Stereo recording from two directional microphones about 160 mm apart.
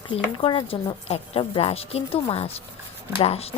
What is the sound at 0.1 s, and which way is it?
Speech, 30° left (ahead or behind).